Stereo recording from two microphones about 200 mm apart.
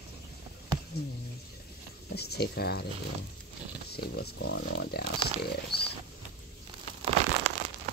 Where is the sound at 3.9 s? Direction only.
50° left (ahead or behind).